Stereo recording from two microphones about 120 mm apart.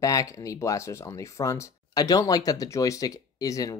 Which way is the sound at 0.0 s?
30° left (ahead or behind).